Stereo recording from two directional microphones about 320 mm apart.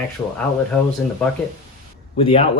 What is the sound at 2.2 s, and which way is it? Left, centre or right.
Speech, centre.